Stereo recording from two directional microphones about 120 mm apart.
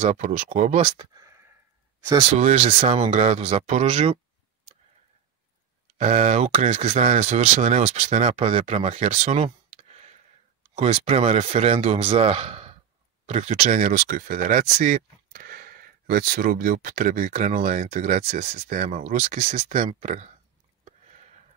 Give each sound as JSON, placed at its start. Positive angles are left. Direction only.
{"t": 0.0, "sound": "speech", "side_deg": -75}
{"t": 0.9, "sound": "a sound", "side_deg": -30}
{"t": 2.3, "sound": "speech", "side_deg": -65}
{"t": 5.9, "sound": "speech", "side_deg": -70}
{"t": 16.9, "sound": "speech", "side_deg": -90}